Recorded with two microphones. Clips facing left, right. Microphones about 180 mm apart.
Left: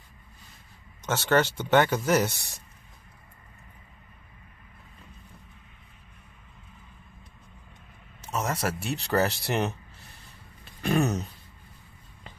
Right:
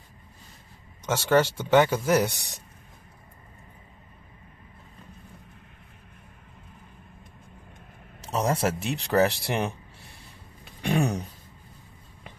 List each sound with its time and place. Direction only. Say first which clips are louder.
1.0 s speech: right 2 dB; 10° right (ahead or behind)
8.2 s a man's voice: right 4 dB; 35° right (ahead or behind)
8.8 s speech: right 2 dB; 15° right (ahead or behind)
10.8 s speech: even; 15° right (ahead or behind)